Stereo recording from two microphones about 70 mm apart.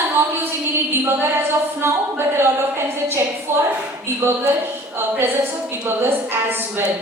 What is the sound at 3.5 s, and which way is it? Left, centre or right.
Speech, right.